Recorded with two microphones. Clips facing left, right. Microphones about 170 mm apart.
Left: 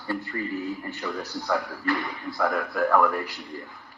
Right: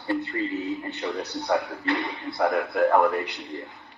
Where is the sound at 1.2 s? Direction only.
70° right (ahead or behind).